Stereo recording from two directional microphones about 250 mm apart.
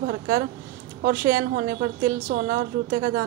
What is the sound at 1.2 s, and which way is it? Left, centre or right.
A woman's voice, right.